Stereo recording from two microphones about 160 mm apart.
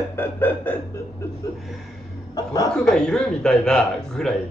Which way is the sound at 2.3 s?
25° left (ahead or behind).